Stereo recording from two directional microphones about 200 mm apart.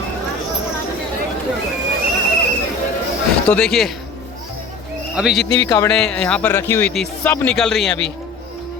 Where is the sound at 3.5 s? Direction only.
5° left (ahead or behind).